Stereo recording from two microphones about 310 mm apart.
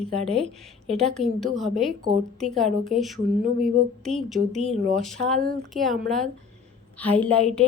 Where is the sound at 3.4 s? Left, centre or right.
Right.